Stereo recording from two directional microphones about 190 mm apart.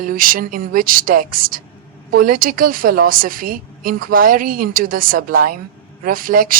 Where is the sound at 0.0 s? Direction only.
50° right (ahead or behind).